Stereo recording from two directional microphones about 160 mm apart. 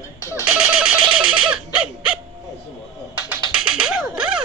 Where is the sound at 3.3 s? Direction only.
5° right (ahead or behind).